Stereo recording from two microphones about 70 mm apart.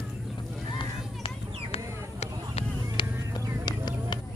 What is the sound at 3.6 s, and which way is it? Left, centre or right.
Clip-clop, left.